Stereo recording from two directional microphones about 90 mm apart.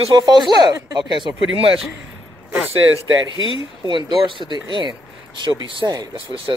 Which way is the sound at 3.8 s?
60° right (ahead or behind).